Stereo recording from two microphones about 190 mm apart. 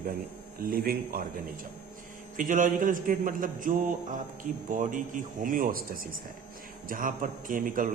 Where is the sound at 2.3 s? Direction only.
45° right (ahead or behind).